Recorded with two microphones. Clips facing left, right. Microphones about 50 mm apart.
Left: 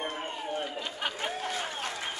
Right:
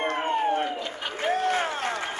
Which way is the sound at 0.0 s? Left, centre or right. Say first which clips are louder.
Right 10 dB; right.